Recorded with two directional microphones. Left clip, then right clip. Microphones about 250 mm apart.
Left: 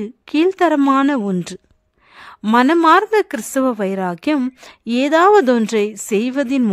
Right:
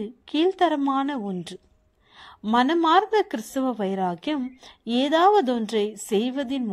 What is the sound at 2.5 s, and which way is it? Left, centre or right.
Speech, left.